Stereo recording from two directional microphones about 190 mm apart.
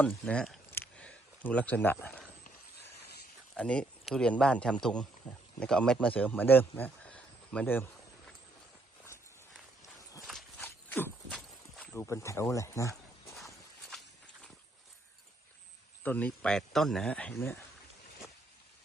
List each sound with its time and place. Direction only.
0.0 s speech: 5° left (ahead or behind)
0.7 s a sound: 10° left (ahead or behind)
3.5 s speech: 5° left (ahead or behind)
9.8 s walk: 20° left (ahead or behind)
10.2 s a sound: 5° left (ahead or behind)
16.0 s speech: 10° left (ahead or behind)